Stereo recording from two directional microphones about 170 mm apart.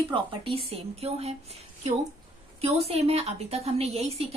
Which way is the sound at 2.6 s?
35° right (ahead or behind).